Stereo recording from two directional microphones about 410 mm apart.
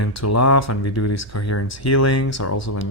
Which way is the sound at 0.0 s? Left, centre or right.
Left.